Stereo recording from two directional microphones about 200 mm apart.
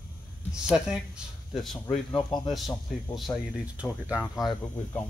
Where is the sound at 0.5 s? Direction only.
5° right (ahead or behind).